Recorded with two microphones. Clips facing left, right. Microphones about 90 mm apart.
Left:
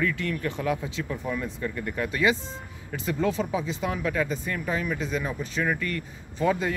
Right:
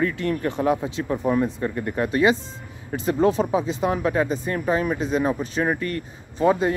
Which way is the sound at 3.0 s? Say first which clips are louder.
Right 7 dB; 50° right (ahead or behind).